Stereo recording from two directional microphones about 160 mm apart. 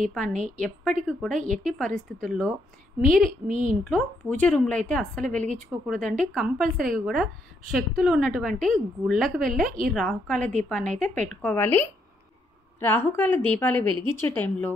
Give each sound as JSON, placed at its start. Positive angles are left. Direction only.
{"t": 0.1, "sound": "a woman's voice", "side_deg": 5}
{"t": 3.4, "sound": "speech", "side_deg": -55}
{"t": 3.9, "sound": "a woman's voice", "side_deg": 10}
{"t": 9.7, "sound": "a woman's voice", "side_deg": -60}
{"t": 9.9, "sound": "a woman's voice", "side_deg": 5}